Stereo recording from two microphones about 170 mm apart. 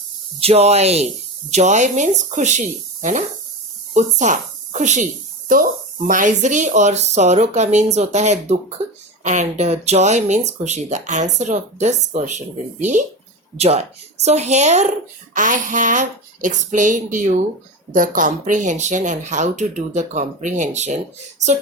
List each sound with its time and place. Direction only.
0.3 s a woman's voice: 35° right (ahead or behind)